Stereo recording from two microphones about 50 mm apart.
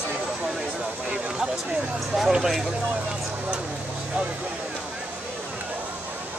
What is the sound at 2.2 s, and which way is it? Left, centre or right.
Speech, centre.